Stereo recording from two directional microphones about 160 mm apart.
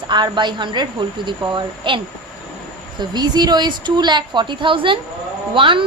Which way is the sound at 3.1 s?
25° right (ahead or behind).